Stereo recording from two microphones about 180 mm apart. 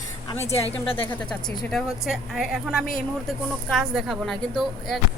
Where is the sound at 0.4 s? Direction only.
30° left (ahead or behind).